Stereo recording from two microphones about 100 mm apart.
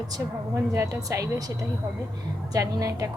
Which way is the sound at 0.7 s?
35° right (ahead or behind).